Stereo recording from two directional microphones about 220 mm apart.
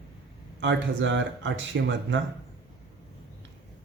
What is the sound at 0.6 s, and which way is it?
Speech, 55° right (ahead or behind).